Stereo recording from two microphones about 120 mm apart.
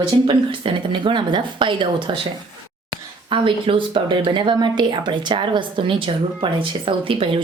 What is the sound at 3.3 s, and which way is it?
Speech, 45° right (ahead or behind).